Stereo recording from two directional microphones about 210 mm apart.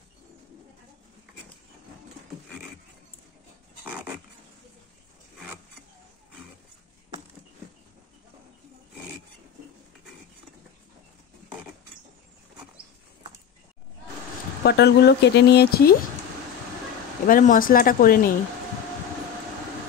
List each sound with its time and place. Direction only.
14.6 s speech: 50° left (ahead or behind)
17.3 s speech: 40° left (ahead or behind)